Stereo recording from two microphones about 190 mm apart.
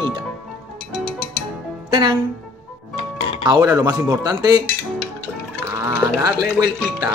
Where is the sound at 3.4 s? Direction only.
20° right (ahead or behind).